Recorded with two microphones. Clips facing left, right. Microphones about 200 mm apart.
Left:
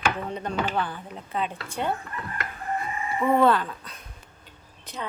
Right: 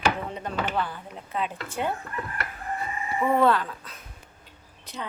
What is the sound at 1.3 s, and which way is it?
Speech, 5° right (ahead or behind).